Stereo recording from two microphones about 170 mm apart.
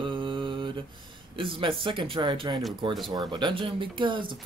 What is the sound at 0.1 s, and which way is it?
Mantra, 30° right (ahead or behind).